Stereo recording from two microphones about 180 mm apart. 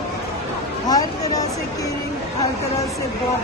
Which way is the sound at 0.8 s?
20° left (ahead or behind).